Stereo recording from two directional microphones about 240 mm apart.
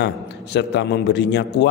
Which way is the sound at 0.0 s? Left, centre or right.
Left.